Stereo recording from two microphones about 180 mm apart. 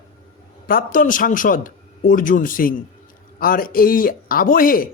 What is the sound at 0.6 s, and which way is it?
Speech, 50° left (ahead or behind).